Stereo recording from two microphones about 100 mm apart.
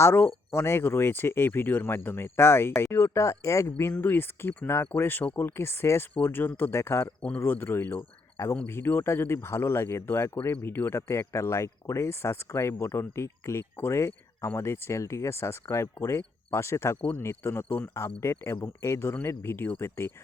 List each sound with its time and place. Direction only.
0.0 s speech: 20° left (ahead or behind)
7.2 s speech: 15° left (ahead or behind)